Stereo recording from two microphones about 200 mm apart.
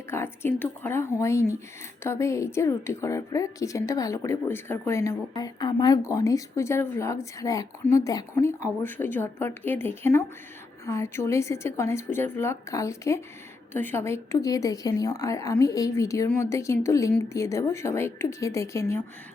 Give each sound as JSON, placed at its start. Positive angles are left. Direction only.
{"t": 0.1, "sound": "a woman's voice", "side_deg": 10}